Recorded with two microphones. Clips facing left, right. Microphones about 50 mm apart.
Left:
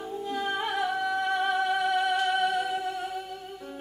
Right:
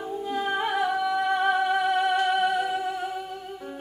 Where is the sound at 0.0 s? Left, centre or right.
Centre.